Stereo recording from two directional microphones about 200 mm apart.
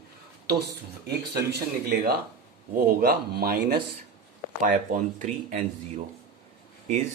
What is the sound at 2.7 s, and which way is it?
Speech, 50° right (ahead or behind).